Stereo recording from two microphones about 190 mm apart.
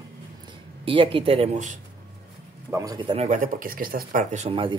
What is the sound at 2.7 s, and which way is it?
Speech, 20° right (ahead or behind).